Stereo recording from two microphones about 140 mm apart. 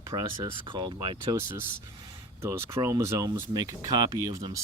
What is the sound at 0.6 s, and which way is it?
Speech, 35° right (ahead or behind).